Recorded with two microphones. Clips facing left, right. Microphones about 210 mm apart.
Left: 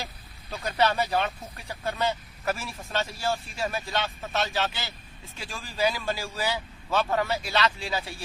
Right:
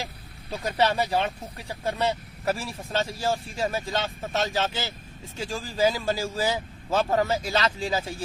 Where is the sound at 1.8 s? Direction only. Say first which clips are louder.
Right 2 dB; 35° right (ahead or behind).